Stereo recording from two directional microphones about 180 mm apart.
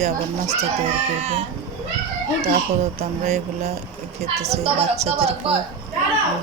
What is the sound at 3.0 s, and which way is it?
Speech, 40° right (ahead or behind).